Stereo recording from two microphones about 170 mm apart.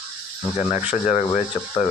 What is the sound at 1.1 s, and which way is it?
Speech, 45° left (ahead or behind).